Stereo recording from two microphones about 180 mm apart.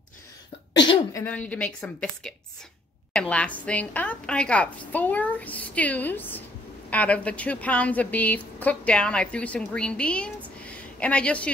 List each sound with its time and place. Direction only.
0.7 s speech: 25° left (ahead or behind)
1.2 s a woman's voice: 10° left (ahead or behind)